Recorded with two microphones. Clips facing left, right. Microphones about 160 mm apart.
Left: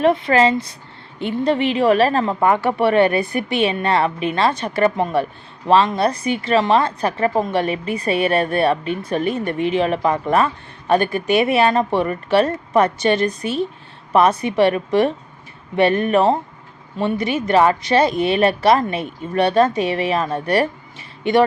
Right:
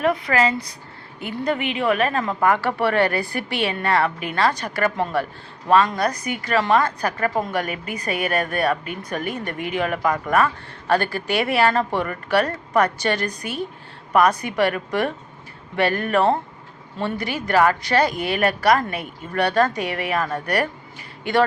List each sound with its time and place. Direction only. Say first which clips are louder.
0.0 s a woman's voice: left 5 dB; 25° left (ahead or behind)